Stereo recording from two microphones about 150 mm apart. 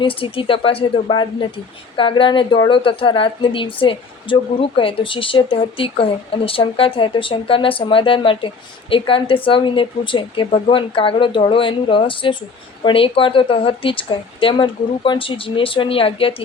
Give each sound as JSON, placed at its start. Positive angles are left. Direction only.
{"t": 0.0, "sound": "speech", "side_deg": 35}